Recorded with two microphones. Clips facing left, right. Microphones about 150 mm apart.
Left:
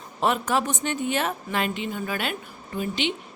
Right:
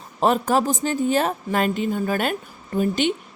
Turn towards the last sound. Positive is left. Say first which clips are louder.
# right 6 dB
turn(degrees=-45)  # may be behind; listen again after turning